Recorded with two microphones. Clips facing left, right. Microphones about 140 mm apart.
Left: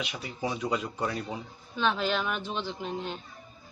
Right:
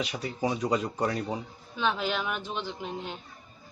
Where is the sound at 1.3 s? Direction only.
10° right (ahead or behind).